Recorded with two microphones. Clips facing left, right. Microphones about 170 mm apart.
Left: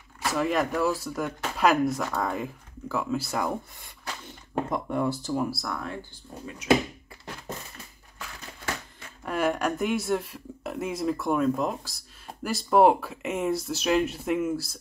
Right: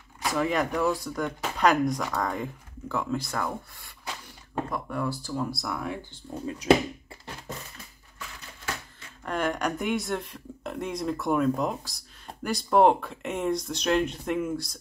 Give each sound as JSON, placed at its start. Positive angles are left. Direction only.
{"t": 0.2, "sound": "speech", "side_deg": 0}
{"t": 3.8, "sound": "a sound", "side_deg": 20}
{"t": 5.5, "sound": "speech", "side_deg": 0}
{"t": 9.2, "sound": "speech", "side_deg": 5}